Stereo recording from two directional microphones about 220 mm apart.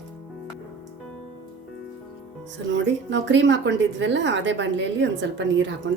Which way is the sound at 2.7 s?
55° right (ahead or behind).